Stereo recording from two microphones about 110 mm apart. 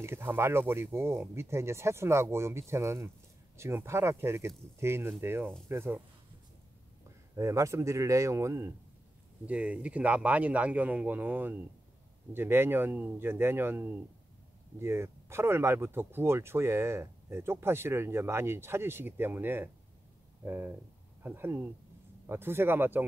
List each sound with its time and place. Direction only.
0.0 s speech: 20° right (ahead or behind)
7.3 s speech: 30° right (ahead or behind)
9.5 s speech: 10° right (ahead or behind)